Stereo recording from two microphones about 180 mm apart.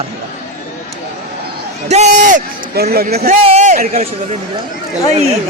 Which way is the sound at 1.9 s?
40° right (ahead or behind).